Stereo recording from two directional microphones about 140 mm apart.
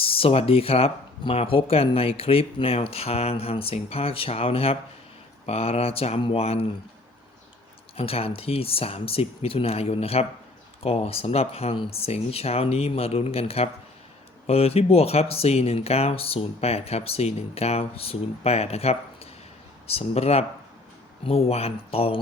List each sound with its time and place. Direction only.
0.0 s speech: 40° left (ahead or behind)
7.9 s speech: 45° left (ahead or behind)